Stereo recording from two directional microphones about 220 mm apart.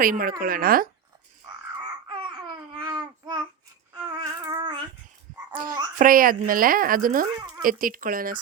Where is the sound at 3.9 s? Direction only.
15° right (ahead or behind).